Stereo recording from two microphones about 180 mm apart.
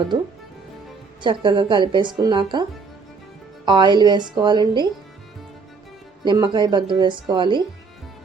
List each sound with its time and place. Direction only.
1.2 s a woman's voice: 25° right (ahead or behind)
3.7 s a woman's voice: 25° right (ahead or behind)
6.2 s a woman's voice: 25° right (ahead or behind)